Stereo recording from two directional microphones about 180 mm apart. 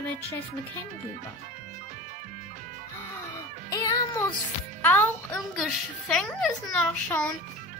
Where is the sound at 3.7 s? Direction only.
20° left (ahead or behind).